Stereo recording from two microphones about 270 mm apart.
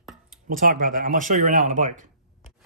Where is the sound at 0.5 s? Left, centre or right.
Right.